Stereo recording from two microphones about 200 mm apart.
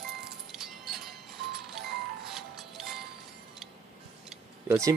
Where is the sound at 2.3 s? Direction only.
Centre (ahead or behind).